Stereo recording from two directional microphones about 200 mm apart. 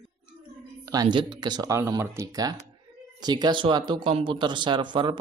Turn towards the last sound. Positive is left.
turn(degrees=-25)  # may be behind; listen again after turning